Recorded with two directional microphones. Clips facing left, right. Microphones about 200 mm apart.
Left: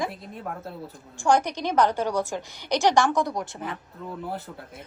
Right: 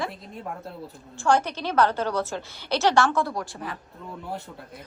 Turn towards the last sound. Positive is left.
turn(degrees=20)  # may be behind; listen again after turning